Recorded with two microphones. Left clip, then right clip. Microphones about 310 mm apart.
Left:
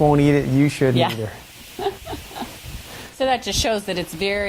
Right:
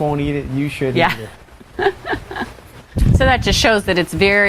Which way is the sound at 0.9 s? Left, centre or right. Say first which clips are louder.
Right 5 dB; right.